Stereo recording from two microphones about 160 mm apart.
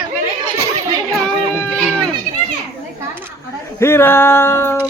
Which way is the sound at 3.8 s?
15° left (ahead or behind).